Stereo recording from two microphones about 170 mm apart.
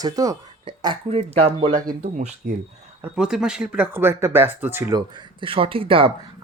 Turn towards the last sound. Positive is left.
turn(degrees=-30)  # may be behind; listen again after turning